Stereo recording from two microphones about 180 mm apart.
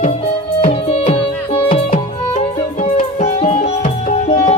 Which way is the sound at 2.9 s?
35° left (ahead or behind).